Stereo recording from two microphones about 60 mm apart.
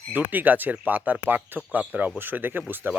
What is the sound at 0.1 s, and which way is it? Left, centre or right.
Speech, right.